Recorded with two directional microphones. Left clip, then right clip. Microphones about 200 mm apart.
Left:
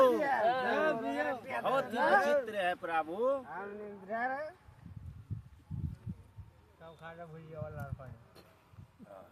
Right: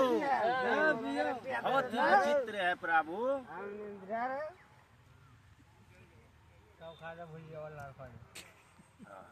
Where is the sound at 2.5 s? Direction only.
25° left (ahead or behind).